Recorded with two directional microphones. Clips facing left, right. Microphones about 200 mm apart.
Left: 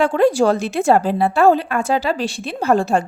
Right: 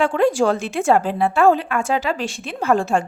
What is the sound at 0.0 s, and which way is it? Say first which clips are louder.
A woman's voice: left 2 dB; 40° left (ahead or behind).